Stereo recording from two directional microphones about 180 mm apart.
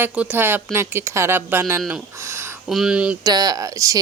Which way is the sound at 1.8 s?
5° right (ahead or behind).